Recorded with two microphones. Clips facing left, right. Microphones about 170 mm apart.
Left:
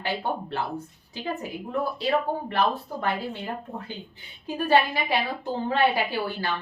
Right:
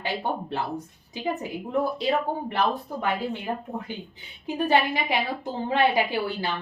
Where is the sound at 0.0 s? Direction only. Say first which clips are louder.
Even; 20° right (ahead or behind).